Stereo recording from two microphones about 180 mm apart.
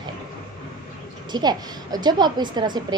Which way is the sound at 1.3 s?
25° right (ahead or behind).